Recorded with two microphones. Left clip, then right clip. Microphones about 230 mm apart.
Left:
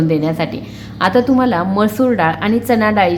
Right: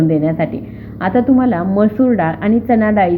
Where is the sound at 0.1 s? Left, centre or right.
Centre.